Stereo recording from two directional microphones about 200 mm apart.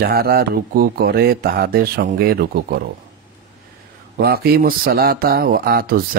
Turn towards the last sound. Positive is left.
turn(degrees=-50)  # may be behind; listen again after turning